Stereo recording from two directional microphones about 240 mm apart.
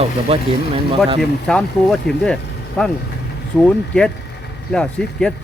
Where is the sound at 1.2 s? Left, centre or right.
Centre.